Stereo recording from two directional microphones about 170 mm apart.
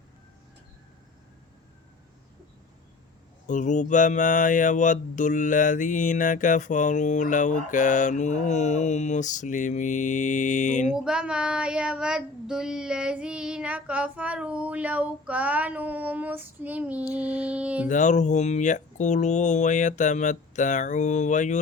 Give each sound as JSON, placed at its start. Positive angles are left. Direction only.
{"t": 3.4, "sound": "speech", "side_deg": 45}
{"t": 10.9, "sound": "child singing", "side_deg": -5}
{"t": 17.8, "sound": "speech", "side_deg": 45}